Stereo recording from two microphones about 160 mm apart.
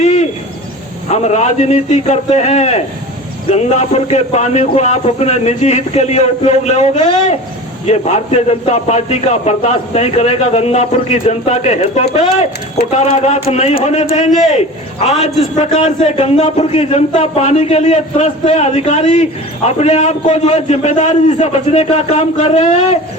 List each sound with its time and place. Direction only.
0.0 s owl: 45° left (ahead or behind)
1.1 s a man's voice: 45° left (ahead or behind)